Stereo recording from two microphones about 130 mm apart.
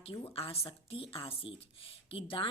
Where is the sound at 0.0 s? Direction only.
45° left (ahead or behind).